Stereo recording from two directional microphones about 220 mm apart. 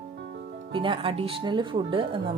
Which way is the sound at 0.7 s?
25° right (ahead or behind).